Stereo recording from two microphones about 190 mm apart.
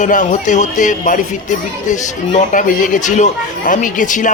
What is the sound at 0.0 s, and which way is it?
A man's voice, 40° left (ahead or behind).